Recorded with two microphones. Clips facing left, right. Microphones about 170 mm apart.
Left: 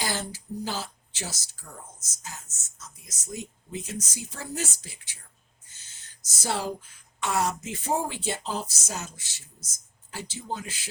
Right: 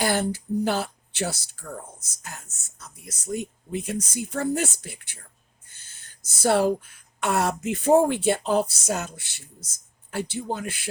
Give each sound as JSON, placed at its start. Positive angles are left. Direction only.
{"t": 0.0, "sound": "speech", "side_deg": -55}
{"t": 6.2, "sound": "speech", "side_deg": -60}